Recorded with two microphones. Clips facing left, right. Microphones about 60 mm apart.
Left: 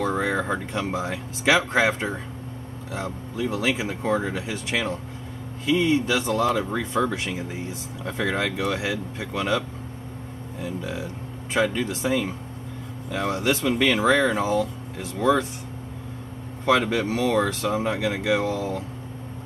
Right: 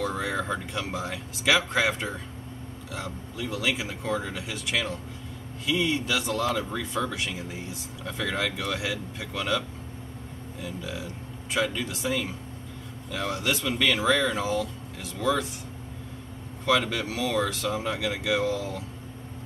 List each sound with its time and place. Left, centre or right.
0.0 s speech: left
16.6 s speech: left